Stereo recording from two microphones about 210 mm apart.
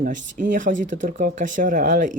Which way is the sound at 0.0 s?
40° right (ahead or behind).